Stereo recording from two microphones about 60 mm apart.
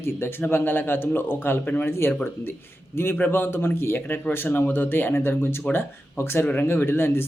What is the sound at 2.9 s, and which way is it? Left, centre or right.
Speech, left.